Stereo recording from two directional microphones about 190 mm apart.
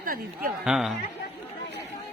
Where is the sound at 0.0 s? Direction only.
50° right (ahead or behind).